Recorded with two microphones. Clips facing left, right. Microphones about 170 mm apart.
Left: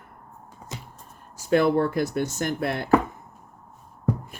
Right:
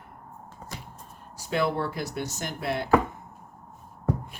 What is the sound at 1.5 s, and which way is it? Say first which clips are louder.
Speech: left 7 dB; 50° left (ahead or behind).